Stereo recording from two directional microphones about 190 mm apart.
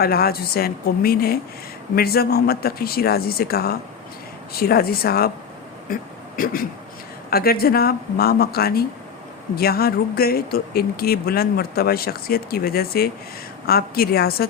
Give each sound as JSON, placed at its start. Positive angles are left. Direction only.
{"t": 0.0, "sound": "speech", "side_deg": 55}